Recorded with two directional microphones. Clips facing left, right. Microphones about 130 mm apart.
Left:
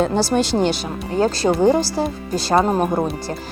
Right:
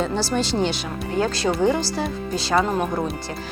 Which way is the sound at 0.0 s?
50° left (ahead or behind).